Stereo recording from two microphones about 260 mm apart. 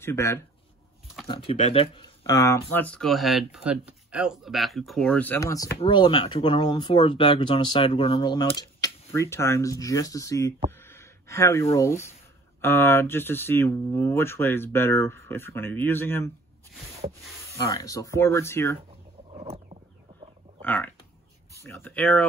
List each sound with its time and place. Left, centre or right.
0.0 s speech: centre
1.2 s speech: left
17.5 s speech: centre
19.3 s a sound: right
20.6 s speech: centre